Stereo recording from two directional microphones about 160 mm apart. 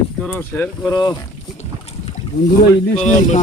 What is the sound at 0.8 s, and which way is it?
Speech, 25° left (ahead or behind).